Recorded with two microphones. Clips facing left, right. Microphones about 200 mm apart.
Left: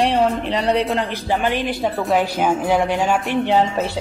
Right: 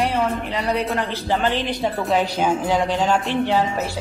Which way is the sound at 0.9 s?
15° left (ahead or behind).